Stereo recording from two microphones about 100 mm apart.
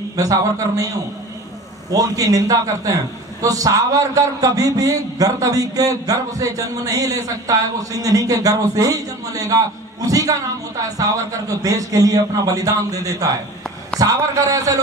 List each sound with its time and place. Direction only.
0.2 s a man's voice: 35° right (ahead or behind)
1.9 s a man's voice: 35° right (ahead or behind)